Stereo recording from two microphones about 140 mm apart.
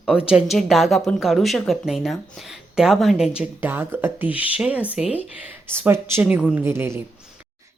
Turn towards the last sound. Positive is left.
turn(degrees=-20)  # may be behind; listen again after turning